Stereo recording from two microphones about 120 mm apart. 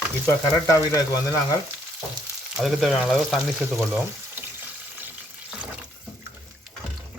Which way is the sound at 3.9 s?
15° right (ahead or behind).